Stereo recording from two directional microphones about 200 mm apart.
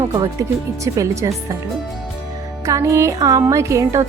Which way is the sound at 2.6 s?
15° right (ahead or behind).